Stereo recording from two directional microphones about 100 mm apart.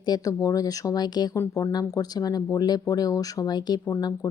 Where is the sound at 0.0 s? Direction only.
40° left (ahead or behind).